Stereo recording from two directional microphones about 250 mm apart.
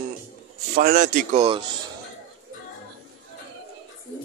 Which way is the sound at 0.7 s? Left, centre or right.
Right.